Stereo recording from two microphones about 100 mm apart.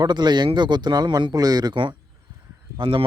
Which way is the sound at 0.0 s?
45° right (ahead or behind).